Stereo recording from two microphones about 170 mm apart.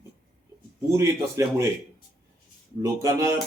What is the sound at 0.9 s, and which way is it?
Speech, 15° right (ahead or behind).